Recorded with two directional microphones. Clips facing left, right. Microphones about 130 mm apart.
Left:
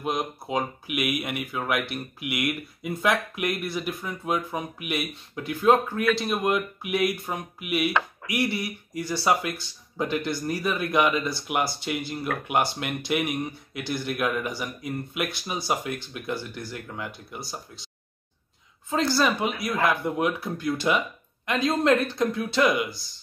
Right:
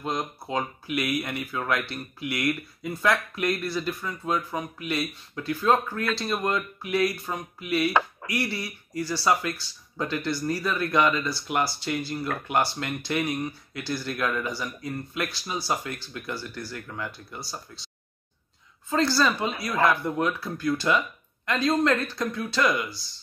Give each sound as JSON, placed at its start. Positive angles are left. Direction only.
{"t": 0.0, "sound": "speech", "side_deg": 15}
{"t": 18.9, "sound": "speech", "side_deg": 20}